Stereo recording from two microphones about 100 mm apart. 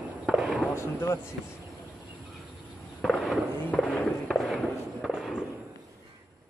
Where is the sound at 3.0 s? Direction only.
Centre (ahead or behind).